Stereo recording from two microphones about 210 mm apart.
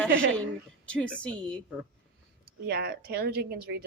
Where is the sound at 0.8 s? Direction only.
5° left (ahead or behind).